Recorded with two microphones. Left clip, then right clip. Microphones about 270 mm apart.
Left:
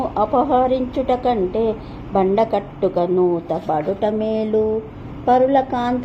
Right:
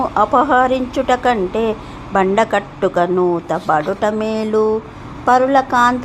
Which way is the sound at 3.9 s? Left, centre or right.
Centre.